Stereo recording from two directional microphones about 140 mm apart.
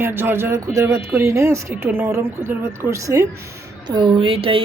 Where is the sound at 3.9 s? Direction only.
35° right (ahead or behind).